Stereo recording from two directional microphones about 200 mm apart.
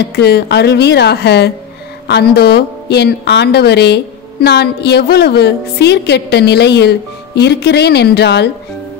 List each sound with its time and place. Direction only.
0.0 s speech: 55° left (ahead or behind)